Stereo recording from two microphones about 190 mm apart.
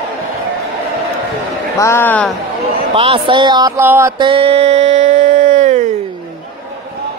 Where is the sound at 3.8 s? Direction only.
10° right (ahead or behind).